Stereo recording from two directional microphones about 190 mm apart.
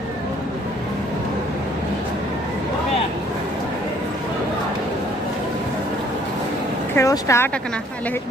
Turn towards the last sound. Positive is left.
turn(degrees=15)  # may be behind; listen again after turning